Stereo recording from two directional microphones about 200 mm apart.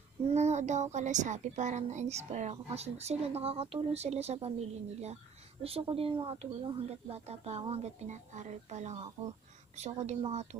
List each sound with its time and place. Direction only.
0.2 s speech: 35° right (ahead or behind)